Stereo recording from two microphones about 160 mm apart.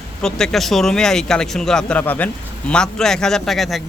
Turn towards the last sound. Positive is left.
turn(degrees=0)  # may be behind; listen again after turning